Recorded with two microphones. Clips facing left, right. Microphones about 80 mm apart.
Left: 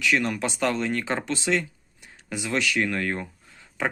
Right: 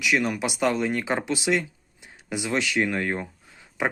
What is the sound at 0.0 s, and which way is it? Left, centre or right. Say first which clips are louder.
Speech: even; centre.